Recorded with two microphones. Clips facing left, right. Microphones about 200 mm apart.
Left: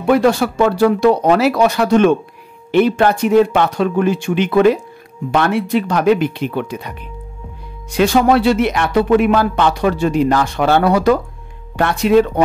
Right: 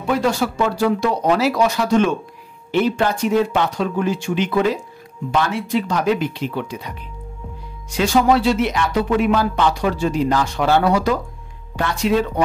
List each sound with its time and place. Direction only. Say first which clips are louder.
0.0 s speech: left 6 dB; 60° left (ahead or behind)
7.9 s speech: left 3 dB; 60° left (ahead or behind)